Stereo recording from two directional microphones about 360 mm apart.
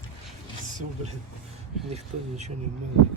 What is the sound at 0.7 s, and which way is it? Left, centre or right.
Speech, right.